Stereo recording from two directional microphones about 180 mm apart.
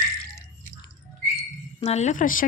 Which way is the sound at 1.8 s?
40° left (ahead or behind).